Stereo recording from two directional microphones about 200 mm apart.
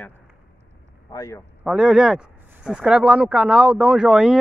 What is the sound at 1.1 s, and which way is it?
Speech, 15° left (ahead or behind).